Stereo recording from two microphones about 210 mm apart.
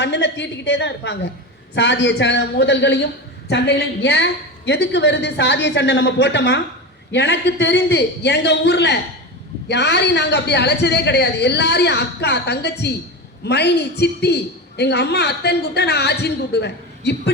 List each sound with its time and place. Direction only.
0.0 s a woman's voice: 55° left (ahead or behind)